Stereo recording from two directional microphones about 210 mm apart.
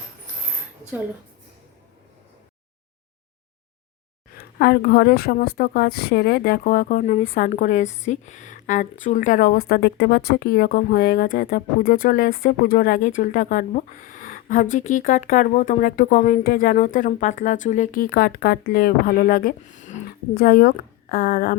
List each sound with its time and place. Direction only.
4.5 s a woman's voice: 50° left (ahead or behind)